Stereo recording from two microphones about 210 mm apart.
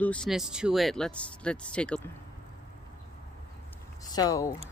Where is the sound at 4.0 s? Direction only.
15° left (ahead or behind).